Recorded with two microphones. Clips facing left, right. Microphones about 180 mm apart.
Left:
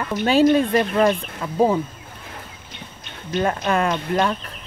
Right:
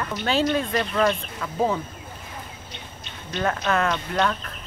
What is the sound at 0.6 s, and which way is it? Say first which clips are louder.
Speech: left 5 dB; 50° left (ahead or behind).